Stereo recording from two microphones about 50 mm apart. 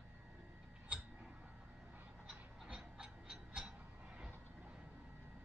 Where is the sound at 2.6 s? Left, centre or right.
Centre.